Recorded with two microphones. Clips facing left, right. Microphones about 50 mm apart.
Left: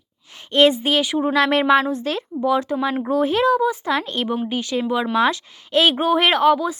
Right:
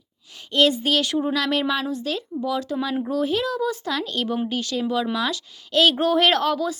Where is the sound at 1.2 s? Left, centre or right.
Left.